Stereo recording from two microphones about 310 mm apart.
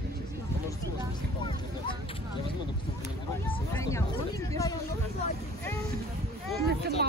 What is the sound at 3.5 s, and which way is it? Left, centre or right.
Speech, centre.